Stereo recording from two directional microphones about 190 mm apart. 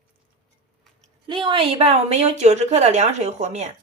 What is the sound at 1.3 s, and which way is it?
A woman's voice, 25° right (ahead or behind).